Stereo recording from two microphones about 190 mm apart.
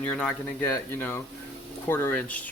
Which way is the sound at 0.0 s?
5° left (ahead or behind).